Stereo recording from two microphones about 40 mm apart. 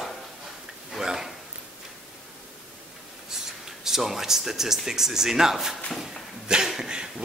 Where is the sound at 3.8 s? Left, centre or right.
Centre.